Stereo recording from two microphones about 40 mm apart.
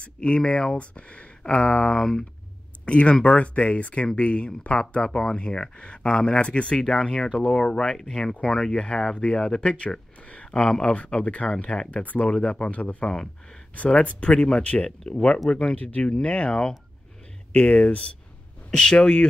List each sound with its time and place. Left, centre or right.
0.0 s speech: left
2.0 s speech: centre
2.8 s speech: left
10.2 s a sound: left
10.5 s speech: centre
11.2 s speech: left
11.5 s speech: left
12.0 s speech: left
12.3 s speech: left
14.0 s speech: left
18.8 s speech: centre